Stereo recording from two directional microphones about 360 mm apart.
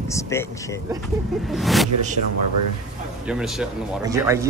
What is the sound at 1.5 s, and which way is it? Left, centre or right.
Speech, centre.